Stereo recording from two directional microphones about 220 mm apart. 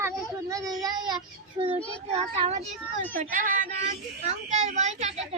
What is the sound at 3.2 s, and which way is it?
A woman's voice, 40° right (ahead or behind).